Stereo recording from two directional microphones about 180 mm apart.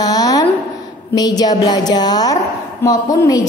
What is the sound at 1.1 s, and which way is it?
A woman's voice, 20° left (ahead or behind).